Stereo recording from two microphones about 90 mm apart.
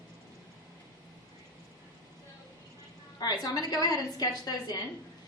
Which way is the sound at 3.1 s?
45° left (ahead or behind).